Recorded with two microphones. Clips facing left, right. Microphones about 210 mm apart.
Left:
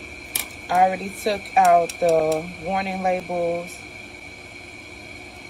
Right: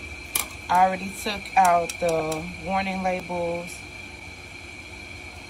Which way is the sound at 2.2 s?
55° left (ahead or behind).